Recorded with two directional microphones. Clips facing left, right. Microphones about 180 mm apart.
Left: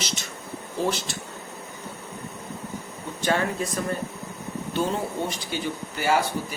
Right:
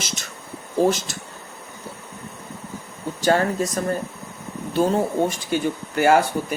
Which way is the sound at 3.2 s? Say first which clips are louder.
Right 5 dB; 40° right (ahead or behind).